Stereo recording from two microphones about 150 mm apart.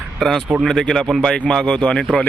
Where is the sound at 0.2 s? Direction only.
Centre (ahead or behind).